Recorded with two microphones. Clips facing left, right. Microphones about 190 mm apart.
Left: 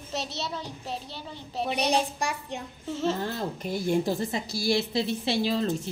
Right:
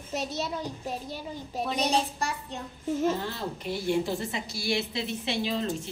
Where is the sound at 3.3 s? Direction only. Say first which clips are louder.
Left 2 dB; 45° left (ahead or behind).